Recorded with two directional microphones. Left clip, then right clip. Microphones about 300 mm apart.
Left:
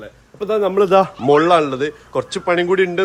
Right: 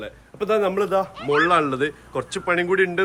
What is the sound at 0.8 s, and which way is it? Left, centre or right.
Speech, left.